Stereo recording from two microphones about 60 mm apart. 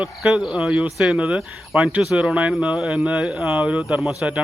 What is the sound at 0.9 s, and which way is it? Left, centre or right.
Speech, centre.